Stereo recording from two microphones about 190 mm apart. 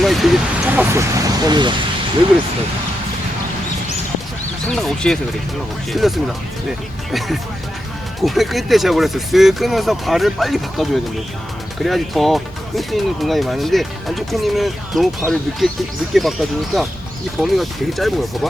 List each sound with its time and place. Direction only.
0.0 s speech: centre (ahead or behind)
0.9 s speech: 15° right (ahead or behind)
4.7 s speech: centre (ahead or behind)